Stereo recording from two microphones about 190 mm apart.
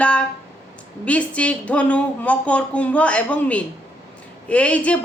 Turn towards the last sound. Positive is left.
turn(degrees=5)  # may be behind; listen again after turning